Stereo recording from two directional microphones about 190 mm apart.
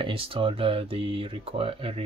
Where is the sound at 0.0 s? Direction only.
30° right (ahead or behind).